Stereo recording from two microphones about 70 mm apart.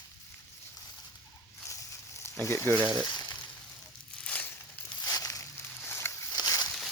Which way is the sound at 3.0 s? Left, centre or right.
Left.